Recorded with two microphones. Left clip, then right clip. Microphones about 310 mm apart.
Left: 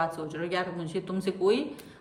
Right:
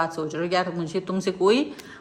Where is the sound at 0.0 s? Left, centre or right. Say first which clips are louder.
Right 5 dB; centre.